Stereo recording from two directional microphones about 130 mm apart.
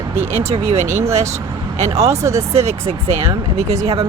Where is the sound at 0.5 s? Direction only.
55° right (ahead or behind).